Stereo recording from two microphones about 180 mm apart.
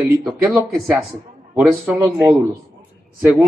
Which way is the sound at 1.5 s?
5° right (ahead or behind).